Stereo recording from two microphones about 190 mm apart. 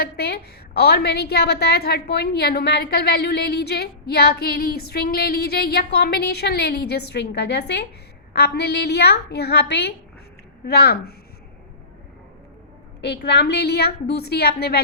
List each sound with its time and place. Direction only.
0.0 s a woman's voice: 55° left (ahead or behind)
13.0 s a woman's voice: 65° left (ahead or behind)